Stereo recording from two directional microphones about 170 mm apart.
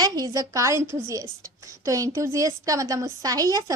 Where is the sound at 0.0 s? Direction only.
20° right (ahead or behind).